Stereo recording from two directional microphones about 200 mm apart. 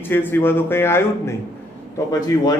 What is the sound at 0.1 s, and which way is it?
A man's voice, 10° left (ahead or behind).